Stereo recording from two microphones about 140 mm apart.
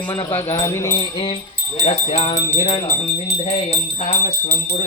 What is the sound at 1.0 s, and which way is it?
Wind chime, 35° left (ahead or behind).